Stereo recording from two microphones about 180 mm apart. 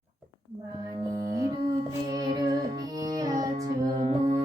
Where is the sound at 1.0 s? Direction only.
20° right (ahead or behind).